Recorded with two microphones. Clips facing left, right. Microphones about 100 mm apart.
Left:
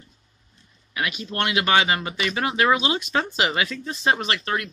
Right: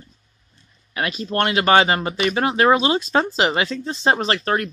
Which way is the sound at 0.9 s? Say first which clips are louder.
Right 5 dB; 40° right (ahead or behind).